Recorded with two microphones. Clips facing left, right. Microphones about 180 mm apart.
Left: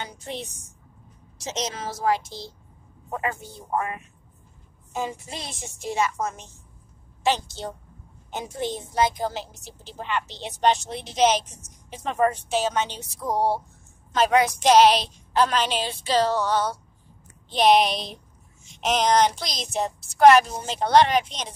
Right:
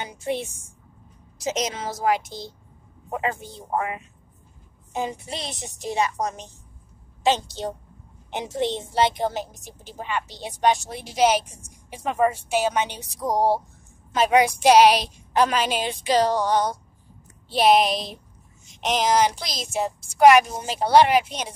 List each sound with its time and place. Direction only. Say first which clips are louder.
0.0 s a sound: right 6 dB; 10° right (ahead or behind)
1.4 s a woman's voice: right 4 dB; 15° right (ahead or behind)
5.4 s a woman's voice: right 3 dB; 70° right (ahead or behind)
5.9 s a woman's voice: right 1 dB; 15° right (ahead or behind)
7.2 s a man's voice: right 2 dB; 20° right (ahead or behind)